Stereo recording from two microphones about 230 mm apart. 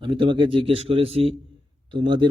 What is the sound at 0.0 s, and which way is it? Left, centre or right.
A man's voice, right.